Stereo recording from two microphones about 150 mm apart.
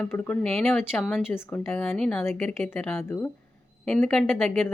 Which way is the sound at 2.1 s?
15° left (ahead or behind).